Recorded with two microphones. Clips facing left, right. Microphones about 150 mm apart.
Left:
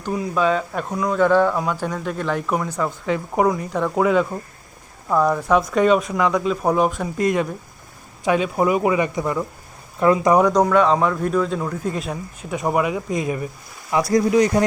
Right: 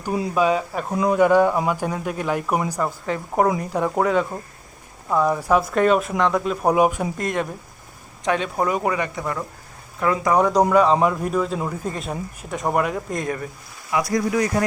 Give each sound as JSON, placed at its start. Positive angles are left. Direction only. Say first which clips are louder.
{"t": 0.3, "sound": "speech", "louder": "even", "side_deg": -10}
{"t": 0.9, "sound": "speech", "louder": "right 1 dB", "side_deg": -20}
{"t": 7.2, "sound": "speech", "louder": "left 5 dB", "side_deg": 0}
{"t": 10.0, "sound": "speech", "louder": "left 5 dB", "side_deg": 25}
{"t": 10.6, "sound": "speech", "louder": "even", "side_deg": -10}
{"t": 13.9, "sound": "speech", "louder": "left 4 dB", "side_deg": 25}